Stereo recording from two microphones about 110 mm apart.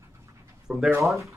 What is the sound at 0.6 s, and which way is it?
Speech, centre (ahead or behind).